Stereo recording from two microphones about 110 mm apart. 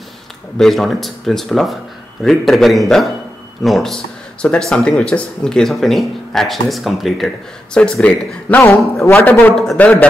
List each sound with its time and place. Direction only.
0.6 s speech: centre (ahead or behind)